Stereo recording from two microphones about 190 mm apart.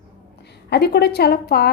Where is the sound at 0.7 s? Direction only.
60° left (ahead or behind).